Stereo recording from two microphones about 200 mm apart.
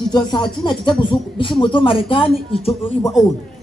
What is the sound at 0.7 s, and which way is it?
A man's voice, 25° left (ahead or behind).